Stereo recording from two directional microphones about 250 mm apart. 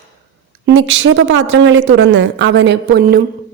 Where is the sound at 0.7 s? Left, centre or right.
Right.